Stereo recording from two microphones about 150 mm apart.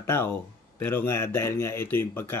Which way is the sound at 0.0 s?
15° left (ahead or behind).